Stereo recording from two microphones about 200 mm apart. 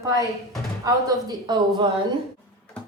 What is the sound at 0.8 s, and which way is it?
A woman's voice, 15° right (ahead or behind).